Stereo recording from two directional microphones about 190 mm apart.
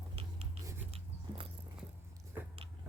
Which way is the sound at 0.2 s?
30° right (ahead or behind).